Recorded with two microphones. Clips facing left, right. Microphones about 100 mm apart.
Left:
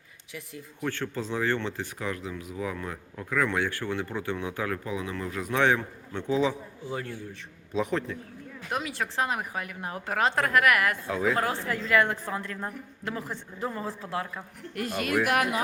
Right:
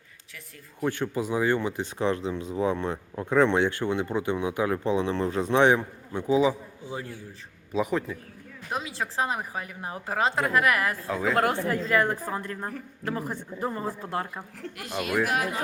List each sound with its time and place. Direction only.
0.9 s speech: 15° right (ahead or behind)
6.8 s speech: 20° right (ahead or behind)
7.7 s a man's voice: 5° right (ahead or behind)
8.7 s speech: 30° right (ahead or behind)
11.0 s a man's voice: centre (ahead or behind)
11.3 s speech: 55° right (ahead or behind)
11.7 s a woman's voice: 35° right (ahead or behind)
13.8 s a woman's voice: 45° right (ahead or behind)
14.8 s speech: 45° left (ahead or behind)
15.2 s speech: 75° left (ahead or behind)